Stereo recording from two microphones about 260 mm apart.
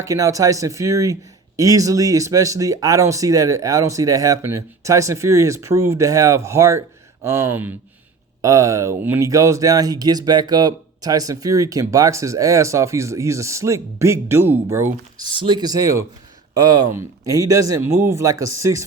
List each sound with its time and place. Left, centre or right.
0.0 s speech: centre